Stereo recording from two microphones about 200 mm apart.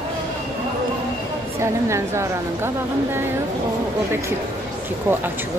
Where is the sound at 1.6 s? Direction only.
15° right (ahead or behind).